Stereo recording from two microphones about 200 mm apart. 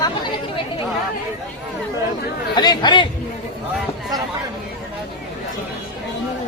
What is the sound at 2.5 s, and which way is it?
Speech, 20° left (ahead or behind).